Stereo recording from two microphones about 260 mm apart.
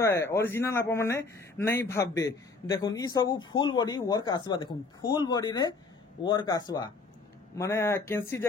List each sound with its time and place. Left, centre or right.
0.0 s speech: centre